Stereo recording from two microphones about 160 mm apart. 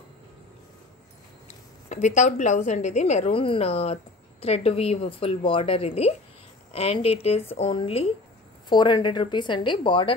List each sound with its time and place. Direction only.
1.9 s a woman's voice: 45° left (ahead or behind); by 10.1 s 30° left (ahead or behind)